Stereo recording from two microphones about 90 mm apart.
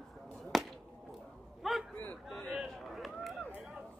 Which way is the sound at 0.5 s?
Centre (ahead or behind).